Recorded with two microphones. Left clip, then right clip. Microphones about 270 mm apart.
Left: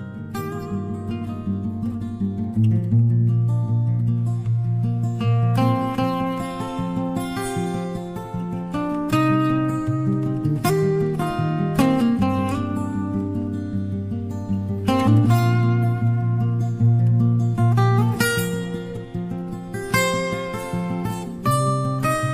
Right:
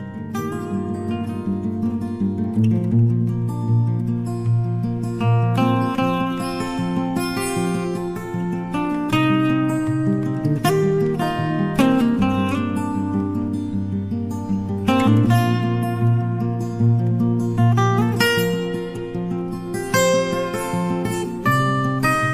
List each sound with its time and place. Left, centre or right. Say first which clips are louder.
5.2 s music: right 2 dB; left
8.7 s music: right 1 dB; left
14.9 s music: right 2 dB; left
17.6 s music: right 2 dB; left
19.9 s music: right 4 dB; left
21.5 s music: right 2 dB; left